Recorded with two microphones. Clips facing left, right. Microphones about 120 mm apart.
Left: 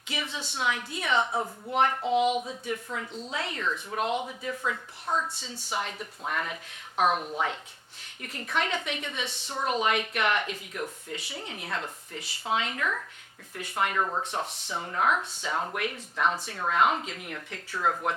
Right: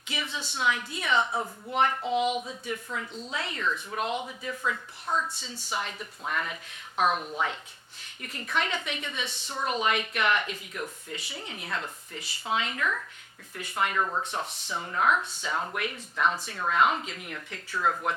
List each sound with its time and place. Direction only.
0.1 s speech: 50° left (ahead or behind)
1.3 s speech: 35° left (ahead or behind)
1.7 s speech: 50° left (ahead or behind)
2.6 s speech: 40° left (ahead or behind)
4.3 s speech: 40° left (ahead or behind)
5.4 s speech: 60° left (ahead or behind)
14.0 s speech: 30° left (ahead or behind)